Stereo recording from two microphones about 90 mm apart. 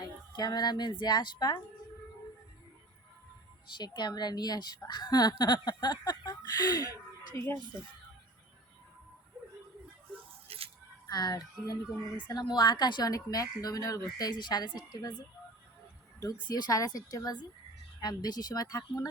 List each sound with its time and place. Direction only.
0.3 s a woman's voice: 50° left (ahead or behind)
3.8 s a woman's voice: 55° left (ahead or behind)
10.5 s a sound: 90° right
11.1 s a woman's voice: 45° left (ahead or behind)
16.2 s a woman's voice: 45° left (ahead or behind)